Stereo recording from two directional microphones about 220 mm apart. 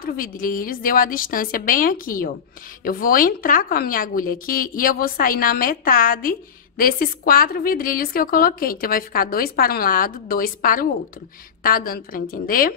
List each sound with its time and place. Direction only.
0.0 s a woman's voice: 40° left (ahead or behind)